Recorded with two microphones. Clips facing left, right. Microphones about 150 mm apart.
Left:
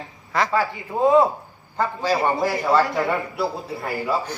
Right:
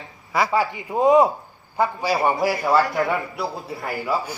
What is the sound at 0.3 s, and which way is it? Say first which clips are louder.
A man's voice: right 1 dB; 10° right (ahead or behind).